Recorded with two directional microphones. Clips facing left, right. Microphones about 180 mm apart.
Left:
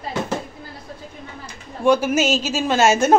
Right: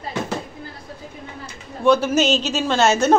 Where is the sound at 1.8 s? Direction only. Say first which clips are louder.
Even; 10° left (ahead or behind).